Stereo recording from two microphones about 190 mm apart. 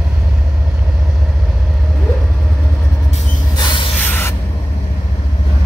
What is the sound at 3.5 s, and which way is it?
Train, 25° left (ahead or behind).